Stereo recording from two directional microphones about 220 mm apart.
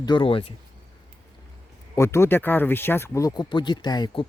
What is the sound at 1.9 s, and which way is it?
Speech, 10° left (ahead or behind).